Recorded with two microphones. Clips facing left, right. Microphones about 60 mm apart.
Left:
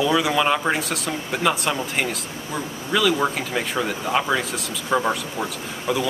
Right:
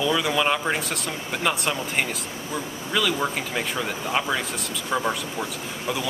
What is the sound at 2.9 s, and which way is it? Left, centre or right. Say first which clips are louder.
Speech: left 4 dB; centre.